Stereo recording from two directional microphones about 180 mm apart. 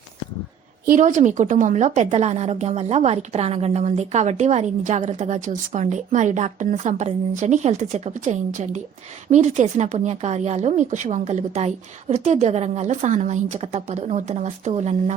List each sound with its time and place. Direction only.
0.9 s a woman's voice: 45° right (ahead or behind)